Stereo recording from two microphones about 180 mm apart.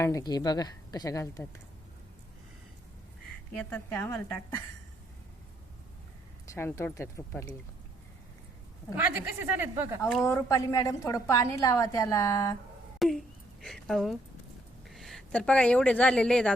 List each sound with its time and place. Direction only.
0.0 s a woman's voice: 20° left (ahead or behind)
3.6 s a woman's voice: 10° left (ahead or behind)
6.5 s a woman's voice: 15° left (ahead or behind)
9.0 s speech: 10° right (ahead or behind)
10.1 s a woman's voice: 10° left (ahead or behind)
13.0 s a sound: centre (ahead or behind)
14.8 s speech: centre (ahead or behind)